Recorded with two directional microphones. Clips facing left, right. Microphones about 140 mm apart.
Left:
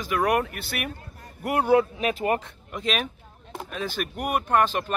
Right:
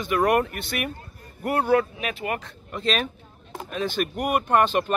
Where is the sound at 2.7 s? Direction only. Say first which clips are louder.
Right 2 dB; 10° left (ahead or behind).